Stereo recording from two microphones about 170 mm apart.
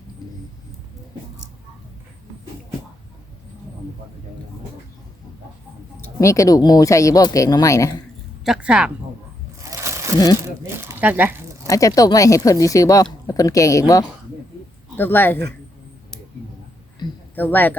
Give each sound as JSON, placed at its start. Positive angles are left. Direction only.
{"t": 6.1, "sound": "a woman's voice", "side_deg": 20}
{"t": 8.4, "sound": "a woman's voice", "side_deg": -5}
{"t": 9.6, "sound": "a sound", "side_deg": -15}
{"t": 10.6, "sound": "speech", "side_deg": -15}
{"t": 11.6, "sound": "a woman's voice", "side_deg": 20}
{"t": 17.3, "sound": "speech", "side_deg": 10}